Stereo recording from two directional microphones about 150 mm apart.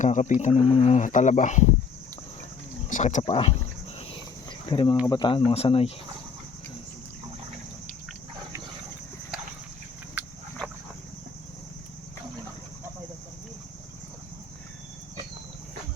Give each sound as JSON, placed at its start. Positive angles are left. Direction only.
{"t": 0.0, "sound": "speech", "side_deg": 50}
{"t": 2.9, "sound": "speech", "side_deg": 55}
{"t": 3.2, "sound": "speech", "side_deg": 35}
{"t": 4.7, "sound": "speech", "side_deg": 35}